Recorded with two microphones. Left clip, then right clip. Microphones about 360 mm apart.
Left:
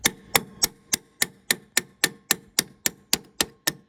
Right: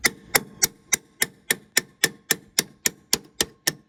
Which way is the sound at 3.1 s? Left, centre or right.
Left.